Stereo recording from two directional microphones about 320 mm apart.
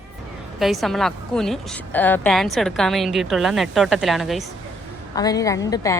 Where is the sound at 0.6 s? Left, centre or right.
Centre.